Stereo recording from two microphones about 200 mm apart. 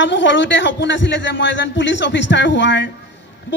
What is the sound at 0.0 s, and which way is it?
A woman's voice, 65° left (ahead or behind).